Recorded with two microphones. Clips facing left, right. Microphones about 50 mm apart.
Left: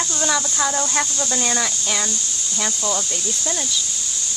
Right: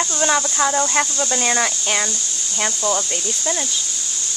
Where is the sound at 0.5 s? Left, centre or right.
Centre.